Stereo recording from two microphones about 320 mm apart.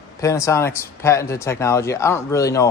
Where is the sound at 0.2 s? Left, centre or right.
Centre.